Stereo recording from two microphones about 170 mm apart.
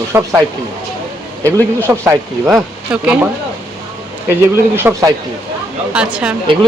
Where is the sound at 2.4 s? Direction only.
5° right (ahead or behind).